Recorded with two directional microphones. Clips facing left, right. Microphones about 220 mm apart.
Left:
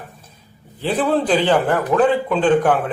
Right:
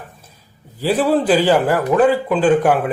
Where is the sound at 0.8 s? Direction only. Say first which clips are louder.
Right 2 dB; 10° right (ahead or behind).